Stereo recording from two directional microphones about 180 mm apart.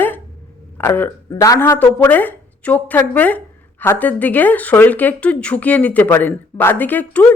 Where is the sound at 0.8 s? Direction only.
10° left (ahead or behind).